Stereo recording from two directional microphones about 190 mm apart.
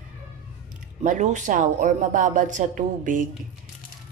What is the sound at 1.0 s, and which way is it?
A woman's voice, 40° right (ahead or behind).